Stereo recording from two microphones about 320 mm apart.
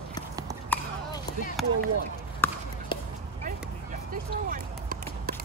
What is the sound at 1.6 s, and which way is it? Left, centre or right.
Speech, centre.